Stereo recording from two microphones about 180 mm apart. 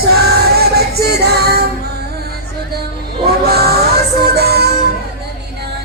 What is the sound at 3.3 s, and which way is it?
Music, 60° right (ahead or behind).